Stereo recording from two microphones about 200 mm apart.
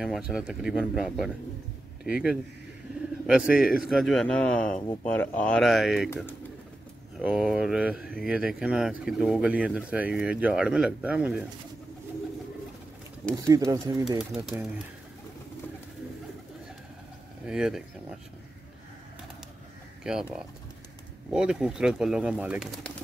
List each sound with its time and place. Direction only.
0.0 s speech: 5° right (ahead or behind)
13.5 s speech: 15° right (ahead or behind)
14.1 s speech: 5° right (ahead or behind)
17.5 s speech: 5° right (ahead or behind)
20.0 s speech: 5° right (ahead or behind)